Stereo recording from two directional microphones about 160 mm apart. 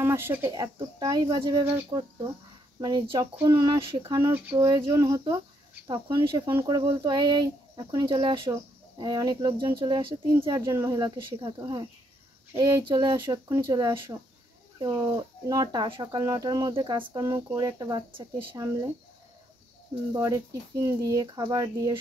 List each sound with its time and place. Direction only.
0.0 s speech: 15° right (ahead or behind)
0.5 s speech: 25° right (ahead or behind)
4.3 s speech: 10° right (ahead or behind)
4.6 s speech: 25° right (ahead or behind)
20.1 s speech: 20° right (ahead or behind)